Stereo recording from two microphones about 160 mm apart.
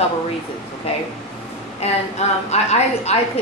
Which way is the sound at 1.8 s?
45° left (ahead or behind).